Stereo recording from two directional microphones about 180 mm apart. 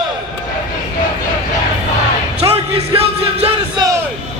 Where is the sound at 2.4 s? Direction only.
35° right (ahead or behind).